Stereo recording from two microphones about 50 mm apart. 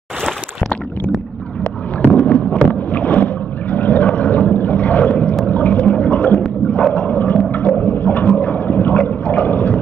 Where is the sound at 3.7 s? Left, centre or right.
Left.